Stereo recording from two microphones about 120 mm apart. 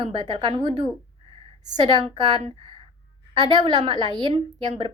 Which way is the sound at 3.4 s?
35° right (ahead or behind).